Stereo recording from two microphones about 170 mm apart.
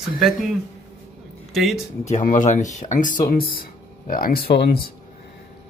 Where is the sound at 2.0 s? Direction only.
45° left (ahead or behind); by 4.9 s 65° left (ahead or behind).